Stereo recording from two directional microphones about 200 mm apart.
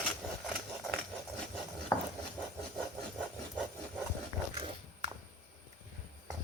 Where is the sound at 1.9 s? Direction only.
10° left (ahead or behind).